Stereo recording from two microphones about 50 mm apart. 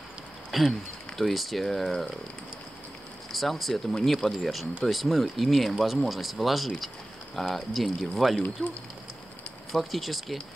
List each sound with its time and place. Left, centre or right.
0.5 s speech: centre
3.3 s speech: centre
8.6 s speech: left
9.8 s speech: centre